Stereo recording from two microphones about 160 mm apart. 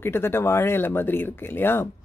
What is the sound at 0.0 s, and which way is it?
Speech, 15° left (ahead or behind).